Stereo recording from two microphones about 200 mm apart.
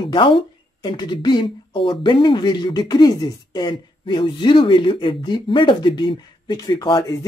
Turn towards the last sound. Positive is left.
turn(degrees=20)  # may be behind; listen again after turning